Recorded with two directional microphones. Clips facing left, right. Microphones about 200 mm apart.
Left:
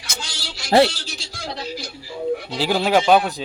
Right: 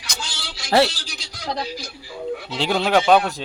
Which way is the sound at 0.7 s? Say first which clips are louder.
Left 2 dB; 25° left (ahead or behind).